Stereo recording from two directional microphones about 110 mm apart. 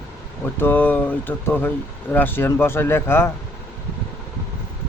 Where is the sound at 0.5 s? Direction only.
20° left (ahead or behind).